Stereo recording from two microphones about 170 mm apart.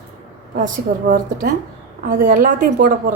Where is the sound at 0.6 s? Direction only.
55° right (ahead or behind).